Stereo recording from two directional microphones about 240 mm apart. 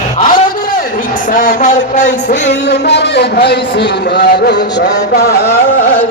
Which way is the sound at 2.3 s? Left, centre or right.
Left.